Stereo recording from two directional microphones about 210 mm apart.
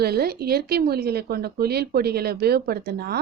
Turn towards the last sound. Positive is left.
turn(degrees=-50)  # may be behind; listen again after turning